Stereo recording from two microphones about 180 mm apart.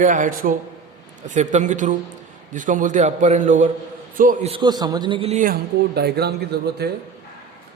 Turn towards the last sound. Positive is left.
turn(degrees=-65)  # may be behind; listen again after turning